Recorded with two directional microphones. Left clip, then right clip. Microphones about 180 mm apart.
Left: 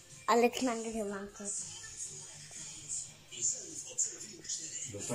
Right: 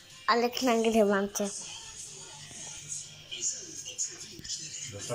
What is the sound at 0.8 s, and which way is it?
Speech, 35° right (ahead or behind).